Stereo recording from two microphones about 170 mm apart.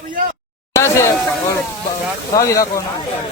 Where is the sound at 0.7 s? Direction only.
15° left (ahead or behind).